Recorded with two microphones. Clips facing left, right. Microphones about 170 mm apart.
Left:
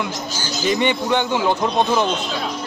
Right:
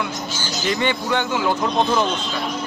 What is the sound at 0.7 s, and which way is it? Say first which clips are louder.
Speech: left 3 dB; 20° left (ahead or behind).